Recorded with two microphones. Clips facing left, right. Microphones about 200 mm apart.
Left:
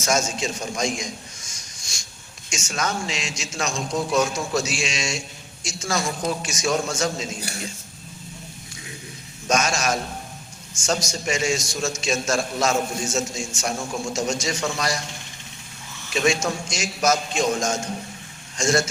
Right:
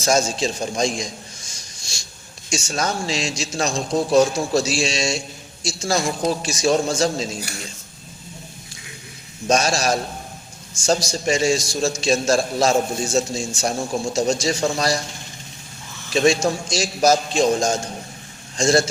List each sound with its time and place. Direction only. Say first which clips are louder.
0.0 s a man's voice: right 4 dB; 30° right (ahead or behind)
9.5 s a man's voice: right 3 dB; 35° right (ahead or behind)
16.0 s a man's voice: right 5 dB; 35° right (ahead or behind)